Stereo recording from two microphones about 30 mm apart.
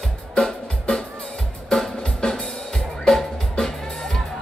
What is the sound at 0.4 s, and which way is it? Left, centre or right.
Music, left.